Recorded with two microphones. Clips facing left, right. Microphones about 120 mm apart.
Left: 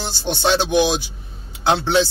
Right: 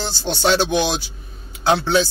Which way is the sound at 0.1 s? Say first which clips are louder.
Even; 20° left (ahead or behind).